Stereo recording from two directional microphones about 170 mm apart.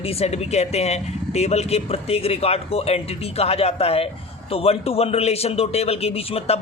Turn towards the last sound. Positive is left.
turn(degrees=35)  # may be behind; listen again after turning